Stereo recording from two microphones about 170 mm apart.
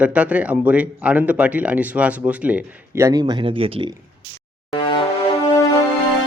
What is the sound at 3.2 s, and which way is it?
Speech, 30° right (ahead or behind).